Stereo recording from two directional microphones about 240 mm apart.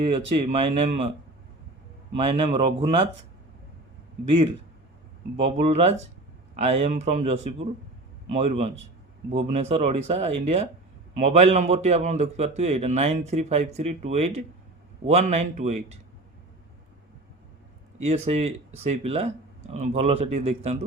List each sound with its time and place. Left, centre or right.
0.1 s a man's voice: right
2.1 s a man's voice: right
5.4 s a man's voice: right
18.0 s a man's voice: right